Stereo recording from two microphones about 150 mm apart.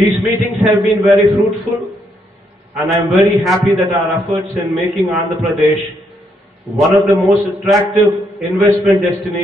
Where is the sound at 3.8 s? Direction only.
20° right (ahead or behind).